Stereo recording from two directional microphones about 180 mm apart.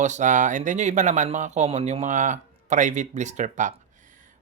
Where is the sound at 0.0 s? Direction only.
40° right (ahead or behind).